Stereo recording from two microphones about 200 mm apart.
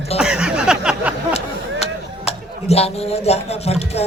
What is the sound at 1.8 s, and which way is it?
Speech, 30° left (ahead or behind).